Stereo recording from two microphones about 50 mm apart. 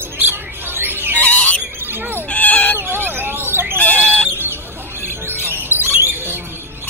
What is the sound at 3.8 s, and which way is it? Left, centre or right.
Bird, left.